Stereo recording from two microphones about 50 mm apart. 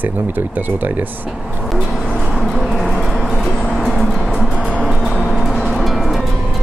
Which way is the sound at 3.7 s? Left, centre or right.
Centre.